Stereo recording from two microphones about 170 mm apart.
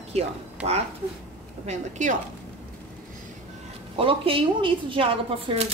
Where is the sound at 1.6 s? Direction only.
45° right (ahead or behind).